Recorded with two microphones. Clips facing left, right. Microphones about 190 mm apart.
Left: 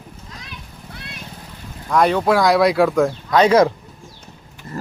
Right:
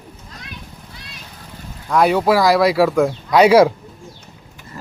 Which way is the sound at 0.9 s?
60° left (ahead or behind).